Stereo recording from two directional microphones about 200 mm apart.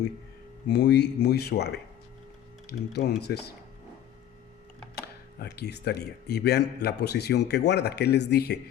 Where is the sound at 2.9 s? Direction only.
55° left (ahead or behind).